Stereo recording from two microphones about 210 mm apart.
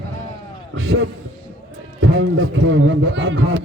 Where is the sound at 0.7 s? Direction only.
65° right (ahead or behind).